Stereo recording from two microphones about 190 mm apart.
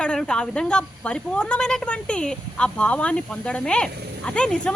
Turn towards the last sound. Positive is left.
turn(degrees=5)  # may be behind; listen again after turning